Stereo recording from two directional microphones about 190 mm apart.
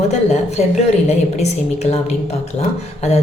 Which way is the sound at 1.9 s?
35° left (ahead or behind).